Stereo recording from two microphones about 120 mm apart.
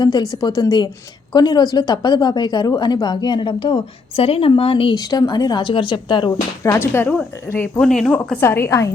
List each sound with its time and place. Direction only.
0.0 s a woman's voice: 35° left (ahead or behind)
4.9 s a woman's voice: 35° left (ahead or behind)
6.6 s speech: 20° left (ahead or behind)
7.8 s speech: 5° left (ahead or behind)
8.1 s a woman's voice: 15° left (ahead or behind)